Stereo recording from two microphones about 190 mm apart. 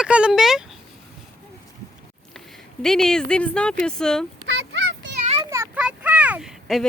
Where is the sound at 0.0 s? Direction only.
5° right (ahead or behind).